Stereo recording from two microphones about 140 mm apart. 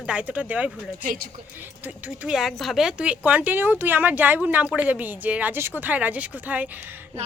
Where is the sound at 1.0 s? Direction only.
75° right (ahead or behind).